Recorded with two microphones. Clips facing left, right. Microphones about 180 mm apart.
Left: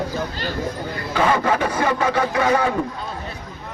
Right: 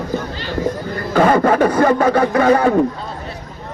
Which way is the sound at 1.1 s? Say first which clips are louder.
Right 6 dB; 45° right (ahead or behind).